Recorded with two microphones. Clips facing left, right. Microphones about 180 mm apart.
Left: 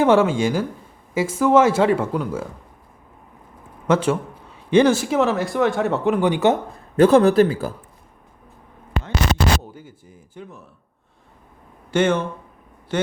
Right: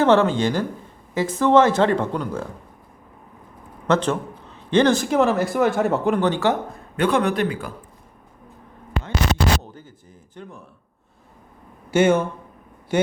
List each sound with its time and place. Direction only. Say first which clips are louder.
0.0 s speech: left 1 dB; 10° left (ahead or behind)
3.8 s a man's voice: left 1 dB; 10° left (ahead or behind)
6.1 s speech: left 2 dB; 10° left (ahead or behind)
6.9 s a man's voice: left 7 dB; 35° left (ahead or behind)
9.7 s a sound: left 2 dB; 10° left (ahead or behind)
11.9 s speech: right 2 dB; 10° right (ahead or behind)